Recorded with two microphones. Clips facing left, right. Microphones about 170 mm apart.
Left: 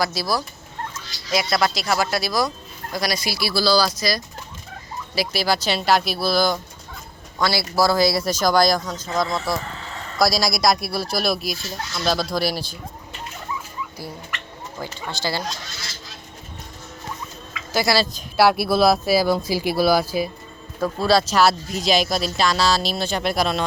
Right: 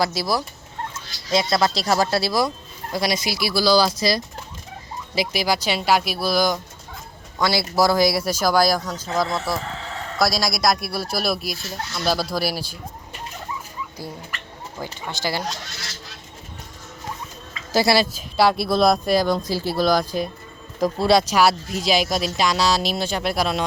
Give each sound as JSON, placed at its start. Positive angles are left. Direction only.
{"t": 0.0, "sound": "speech", "side_deg": -25}
{"t": 15.0, "sound": "speech", "side_deg": -15}
{"t": 15.4, "sound": "speech", "side_deg": -65}
{"t": 17.5, "sound": "a sound", "side_deg": -35}
{"t": 17.8, "sound": "speech", "side_deg": -20}
{"t": 18.1, "sound": "speech", "side_deg": 5}
{"t": 21.0, "sound": "speech", "side_deg": -20}